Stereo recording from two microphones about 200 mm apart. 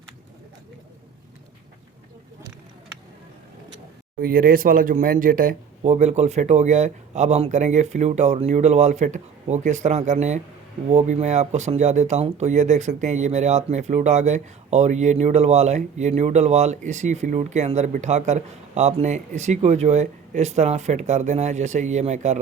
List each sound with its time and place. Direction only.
4.2 s speech: 45° right (ahead or behind)